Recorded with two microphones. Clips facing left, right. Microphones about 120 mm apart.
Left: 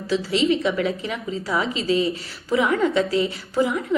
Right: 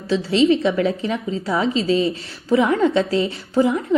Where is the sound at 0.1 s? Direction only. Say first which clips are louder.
Right 4 dB; 30° right (ahead or behind).